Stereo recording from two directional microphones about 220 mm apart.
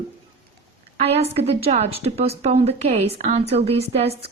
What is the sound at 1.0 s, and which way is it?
A woman's voice, 25° right (ahead or behind).